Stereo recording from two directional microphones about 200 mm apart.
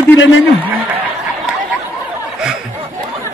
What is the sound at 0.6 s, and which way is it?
Snicker, 5° right (ahead or behind).